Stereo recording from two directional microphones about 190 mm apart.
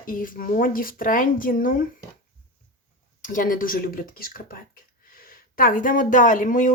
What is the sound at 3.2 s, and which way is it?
A woman's voice, 45° left (ahead or behind).